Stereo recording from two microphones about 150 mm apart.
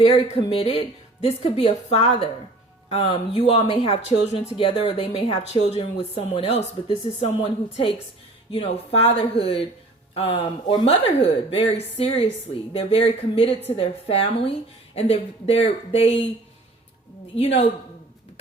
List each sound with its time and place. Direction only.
0.0 s speech: 35° left (ahead or behind)
17.3 s speech: 40° left (ahead or behind)